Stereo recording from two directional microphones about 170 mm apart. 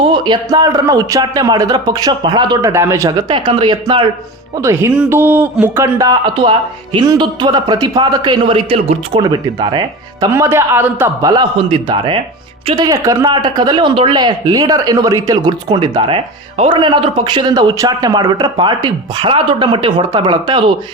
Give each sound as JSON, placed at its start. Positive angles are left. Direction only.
{"t": 0.1, "sound": "speech", "side_deg": -25}
{"t": 4.6, "sound": "speech", "side_deg": -15}
{"t": 10.3, "sound": "a man's voice", "side_deg": -15}